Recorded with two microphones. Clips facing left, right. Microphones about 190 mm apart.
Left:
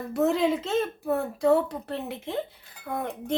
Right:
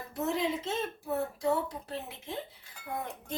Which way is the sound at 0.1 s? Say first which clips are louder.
Left 8 dB; 75° left (ahead or behind).